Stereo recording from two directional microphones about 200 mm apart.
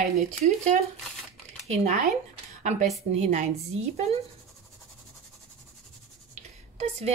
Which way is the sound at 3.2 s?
35° right (ahead or behind).